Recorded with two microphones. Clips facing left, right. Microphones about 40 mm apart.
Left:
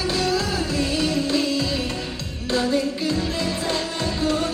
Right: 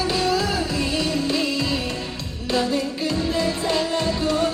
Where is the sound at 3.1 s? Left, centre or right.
Right.